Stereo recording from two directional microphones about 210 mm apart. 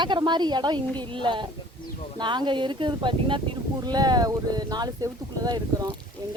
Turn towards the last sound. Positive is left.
turn(degrees=-15)  # may be behind; listen again after turning